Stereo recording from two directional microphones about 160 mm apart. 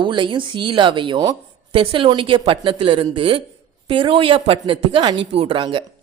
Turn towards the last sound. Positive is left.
turn(degrees=-30)  # may be behind; listen again after turning